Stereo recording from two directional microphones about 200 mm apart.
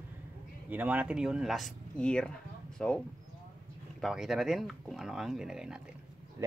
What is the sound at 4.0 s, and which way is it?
Speech, centre (ahead or behind).